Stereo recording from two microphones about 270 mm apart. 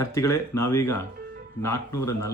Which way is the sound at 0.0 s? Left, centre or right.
Centre.